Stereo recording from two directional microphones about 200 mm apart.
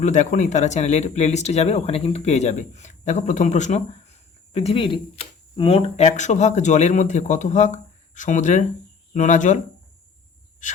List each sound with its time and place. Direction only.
0.0 s speech: 35° left (ahead or behind)